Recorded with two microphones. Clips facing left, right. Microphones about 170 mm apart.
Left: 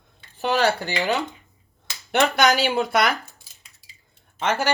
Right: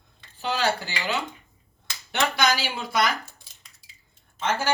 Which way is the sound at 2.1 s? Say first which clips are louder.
Left 5 dB; 65° left (ahead or behind).